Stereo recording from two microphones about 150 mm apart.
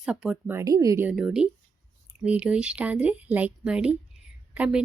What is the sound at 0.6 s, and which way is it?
Speech, 25° right (ahead or behind).